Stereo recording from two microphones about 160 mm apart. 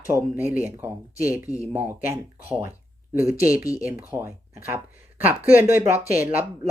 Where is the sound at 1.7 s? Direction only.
15° right (ahead or behind).